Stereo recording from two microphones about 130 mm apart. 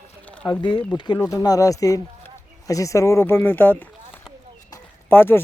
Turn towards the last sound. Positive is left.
turn(degrees=15)  # may be behind; listen again after turning